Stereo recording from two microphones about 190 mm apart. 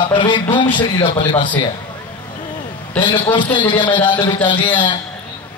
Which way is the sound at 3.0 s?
25° left (ahead or behind).